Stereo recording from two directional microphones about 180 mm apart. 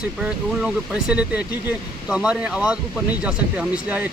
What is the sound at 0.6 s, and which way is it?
Speech, 5° right (ahead or behind).